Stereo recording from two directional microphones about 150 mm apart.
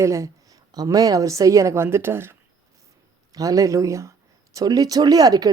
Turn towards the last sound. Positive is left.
turn(degrees=-25)  # may be behind; listen again after turning